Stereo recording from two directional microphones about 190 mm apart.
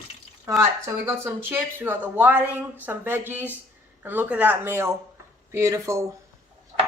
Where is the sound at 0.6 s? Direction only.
15° right (ahead or behind).